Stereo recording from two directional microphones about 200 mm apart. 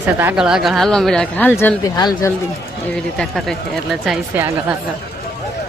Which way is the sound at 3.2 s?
Centre (ahead or behind).